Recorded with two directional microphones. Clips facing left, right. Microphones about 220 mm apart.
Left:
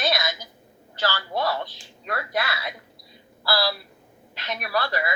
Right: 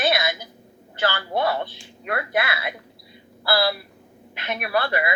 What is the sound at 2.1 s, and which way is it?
Speech, 55° right (ahead or behind).